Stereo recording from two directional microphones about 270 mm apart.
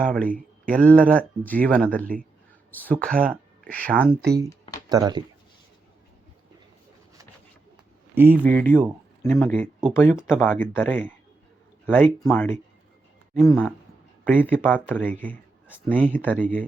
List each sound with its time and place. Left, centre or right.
0.0 s speech: centre
0.3 s speech: right
0.8 s speech: centre
4.9 s speech: centre
8.1 s speech: centre
8.4 s speech: centre